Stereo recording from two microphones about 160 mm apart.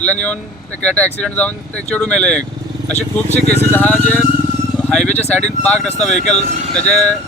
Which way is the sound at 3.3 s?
45° left (ahead or behind).